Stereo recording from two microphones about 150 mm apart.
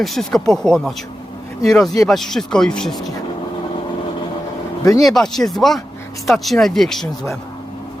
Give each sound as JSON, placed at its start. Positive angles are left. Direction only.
{"t": 0.0, "sound": "speech", "side_deg": 0}
{"t": 4.8, "sound": "speech", "side_deg": 25}
{"t": 5.0, "sound": "speech", "side_deg": 0}